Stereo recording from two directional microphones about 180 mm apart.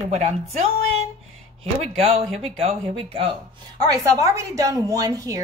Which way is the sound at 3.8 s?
20° right (ahead or behind).